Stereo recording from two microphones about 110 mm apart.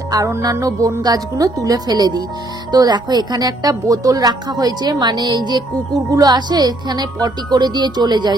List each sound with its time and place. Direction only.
0.1 s a woman's voice: 30° right (ahead or behind)